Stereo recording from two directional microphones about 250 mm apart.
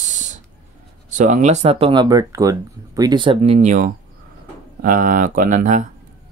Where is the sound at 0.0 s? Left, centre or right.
Right.